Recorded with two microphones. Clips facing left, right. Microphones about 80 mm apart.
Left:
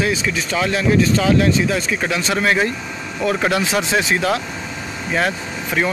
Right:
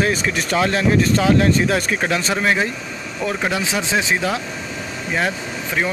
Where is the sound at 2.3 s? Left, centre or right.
Centre.